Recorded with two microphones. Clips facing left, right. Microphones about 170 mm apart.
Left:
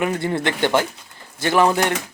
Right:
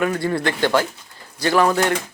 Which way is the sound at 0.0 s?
20° left (ahead or behind).